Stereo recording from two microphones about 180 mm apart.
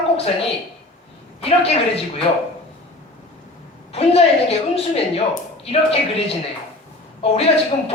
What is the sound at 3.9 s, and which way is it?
A woman's voice, 35° left (ahead or behind).